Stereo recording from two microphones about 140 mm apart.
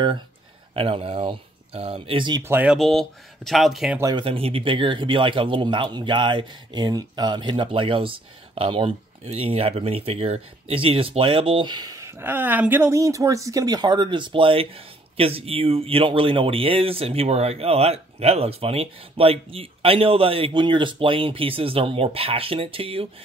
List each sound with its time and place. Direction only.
0.7 s speech: 40° right (ahead or behind)
2.4 s speech: 10° right (ahead or behind)
4.0 s speech: 35° right (ahead or behind)